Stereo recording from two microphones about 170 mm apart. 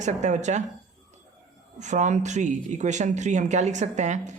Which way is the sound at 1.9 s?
45° right (ahead or behind).